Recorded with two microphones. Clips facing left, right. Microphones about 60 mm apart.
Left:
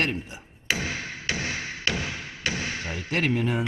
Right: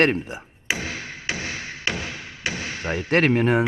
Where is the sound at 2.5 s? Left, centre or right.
Centre.